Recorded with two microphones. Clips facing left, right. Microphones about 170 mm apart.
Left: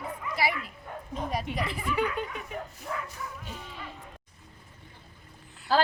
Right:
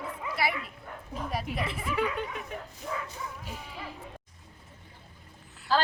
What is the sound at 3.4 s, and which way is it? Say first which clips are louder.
Speech: even; 10° right (ahead or behind).